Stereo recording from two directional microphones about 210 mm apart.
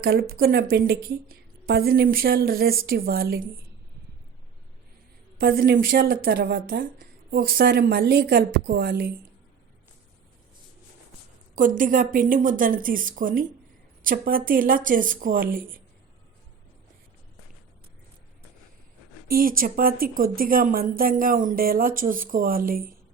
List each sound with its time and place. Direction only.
0.0 s a woman's voice: 45° right (ahead or behind)
5.4 s a woman's voice: 45° right (ahead or behind)
11.5 s a woman's voice: 40° right (ahead or behind)
19.3 s a woman's voice: 45° right (ahead or behind)